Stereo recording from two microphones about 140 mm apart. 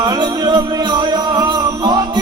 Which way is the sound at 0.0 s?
30° right (ahead or behind).